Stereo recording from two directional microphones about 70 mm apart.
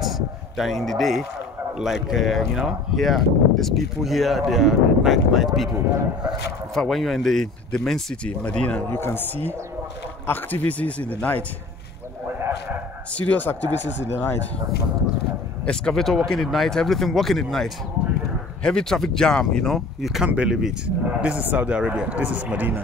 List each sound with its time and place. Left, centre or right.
0.0 s a sound: centre
1.8 s speech: centre
6.7 s speech: centre
8.9 s speech: left
12.4 s a sound: right
13.1 s speech: left
15.6 s speech: centre
20.0 s speech: centre; by 22.8 s right